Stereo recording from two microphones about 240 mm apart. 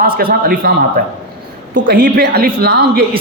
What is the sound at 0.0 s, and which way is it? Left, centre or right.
A man's voice, right.